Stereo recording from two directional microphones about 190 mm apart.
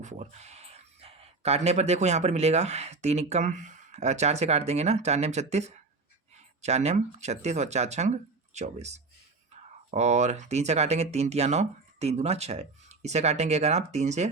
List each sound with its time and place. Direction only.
0.0 s speech: 35° right (ahead or behind)